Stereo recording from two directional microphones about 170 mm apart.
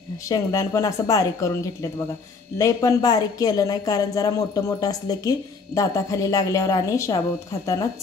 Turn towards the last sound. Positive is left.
turn(degrees=20)  # may be behind; listen again after turning